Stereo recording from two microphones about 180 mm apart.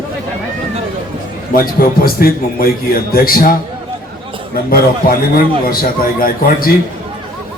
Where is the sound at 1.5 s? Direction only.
55° left (ahead or behind).